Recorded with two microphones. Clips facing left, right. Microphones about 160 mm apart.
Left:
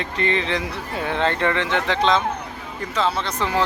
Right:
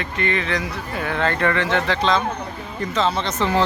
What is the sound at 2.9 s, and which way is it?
Speech, 10° left (ahead or behind).